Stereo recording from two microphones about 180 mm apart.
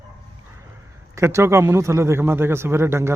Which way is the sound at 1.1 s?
15° right (ahead or behind).